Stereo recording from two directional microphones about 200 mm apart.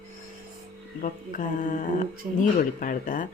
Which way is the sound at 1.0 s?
40° left (ahead or behind).